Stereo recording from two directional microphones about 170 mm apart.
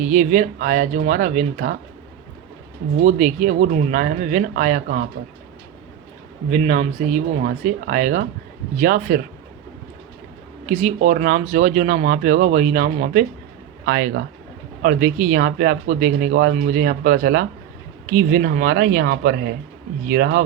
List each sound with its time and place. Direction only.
0.0 s speech: 45° right (ahead or behind)
3.0 s speech: 45° right (ahead or behind)
6.5 s speech: 45° right (ahead or behind)
10.7 s speech: 40° right (ahead or behind)
13.8 s speech: 70° right (ahead or behind)
14.8 s speech: 50° right (ahead or behind)